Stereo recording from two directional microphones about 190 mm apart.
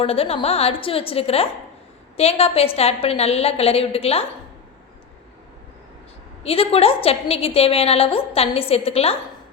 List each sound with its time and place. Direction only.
0.0 s a woman's voice: 30° left (ahead or behind)
6.4 s a woman's voice: 30° left (ahead or behind)